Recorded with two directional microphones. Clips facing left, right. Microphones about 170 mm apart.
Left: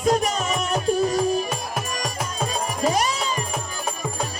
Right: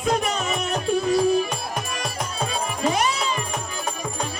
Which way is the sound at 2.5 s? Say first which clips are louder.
Left 1 dB; 40° left (ahead or behind).